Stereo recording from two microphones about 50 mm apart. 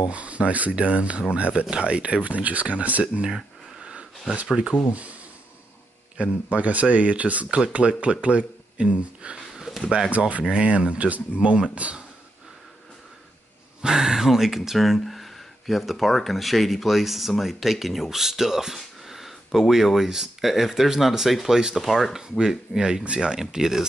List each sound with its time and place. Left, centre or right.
0.1 s speech: right
3.3 s a sound: centre
4.6 s speech: right
6.1 s speech: right
9.6 s a sound: centre
10.1 s speech: right
10.4 s speech: centre
13.7 s speech: centre